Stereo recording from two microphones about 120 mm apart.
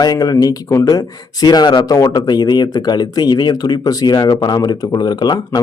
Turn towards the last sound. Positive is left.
turn(degrees=35)  # may be behind; listen again after turning